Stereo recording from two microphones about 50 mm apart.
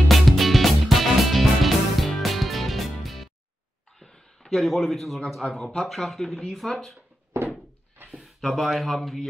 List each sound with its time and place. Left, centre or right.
0.1 s music: centre
4.0 s a sound: centre
4.6 s a man's voice: centre
7.3 s thunk: right
8.1 s speech: centre